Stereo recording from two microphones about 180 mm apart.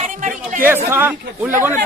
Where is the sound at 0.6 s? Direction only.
10° right (ahead or behind).